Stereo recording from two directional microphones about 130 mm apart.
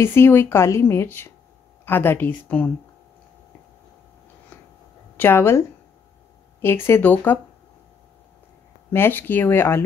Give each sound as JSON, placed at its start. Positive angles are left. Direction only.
{"t": 0.0, "sound": "speech", "side_deg": 20}
{"t": 5.1, "sound": "a woman's voice", "side_deg": 15}
{"t": 6.6, "sound": "speech", "side_deg": 20}
{"t": 8.9, "sound": "speech", "side_deg": 15}